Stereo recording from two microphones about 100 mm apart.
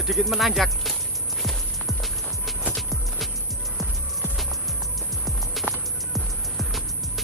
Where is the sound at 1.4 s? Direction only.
Centre (ahead or behind).